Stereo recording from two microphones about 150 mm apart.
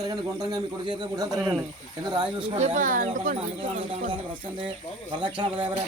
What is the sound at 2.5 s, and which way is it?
Speech, 50° right (ahead or behind).